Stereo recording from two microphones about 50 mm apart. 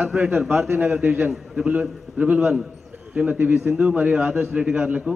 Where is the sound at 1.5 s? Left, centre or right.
Right.